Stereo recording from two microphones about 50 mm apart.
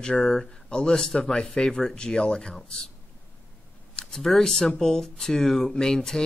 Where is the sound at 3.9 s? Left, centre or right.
Centre.